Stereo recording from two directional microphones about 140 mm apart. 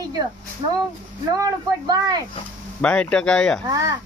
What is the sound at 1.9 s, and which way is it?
Speech, 30° right (ahead or behind).